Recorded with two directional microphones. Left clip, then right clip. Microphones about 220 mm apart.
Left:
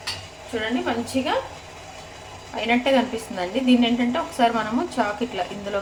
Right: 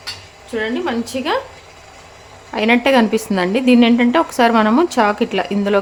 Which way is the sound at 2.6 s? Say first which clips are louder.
Right 7 dB; 50° right (ahead or behind).